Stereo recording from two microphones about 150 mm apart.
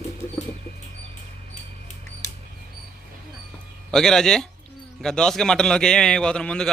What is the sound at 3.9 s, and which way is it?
A man's voice, 5° left (ahead or behind).